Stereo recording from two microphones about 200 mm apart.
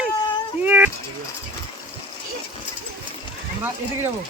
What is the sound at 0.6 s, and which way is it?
Vehicle, 10° right (ahead or behind).